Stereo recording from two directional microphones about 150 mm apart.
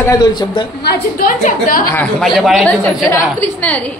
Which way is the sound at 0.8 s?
70° left (ahead or behind).